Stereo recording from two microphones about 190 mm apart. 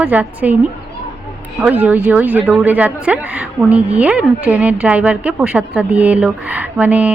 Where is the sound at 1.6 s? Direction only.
10° right (ahead or behind).